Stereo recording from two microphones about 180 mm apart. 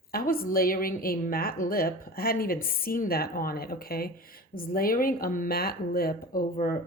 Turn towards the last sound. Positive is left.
turn(degrees=50)  # may be behind; listen again after turning